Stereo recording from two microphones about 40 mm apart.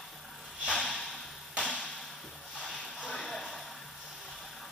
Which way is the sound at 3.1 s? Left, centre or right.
Centre.